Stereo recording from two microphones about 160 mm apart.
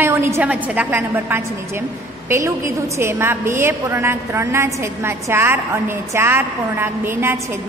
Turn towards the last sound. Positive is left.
turn(degrees=-15)  # may be behind; listen again after turning